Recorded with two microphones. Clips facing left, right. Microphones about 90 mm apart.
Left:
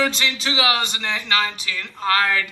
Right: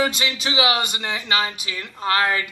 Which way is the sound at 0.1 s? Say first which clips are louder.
Even; 10° right (ahead or behind).